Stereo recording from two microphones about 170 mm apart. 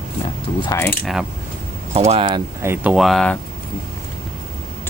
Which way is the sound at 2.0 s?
30° right (ahead or behind).